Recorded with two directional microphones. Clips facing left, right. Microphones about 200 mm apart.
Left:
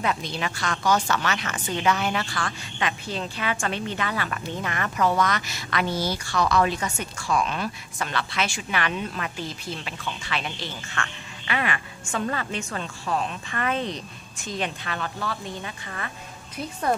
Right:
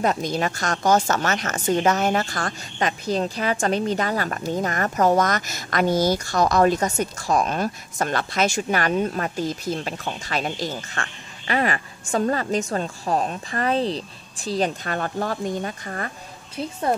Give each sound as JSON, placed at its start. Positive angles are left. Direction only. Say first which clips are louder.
{"t": 0.0, "sound": "a woman's voice", "louder": "right 5 dB", "side_deg": -45}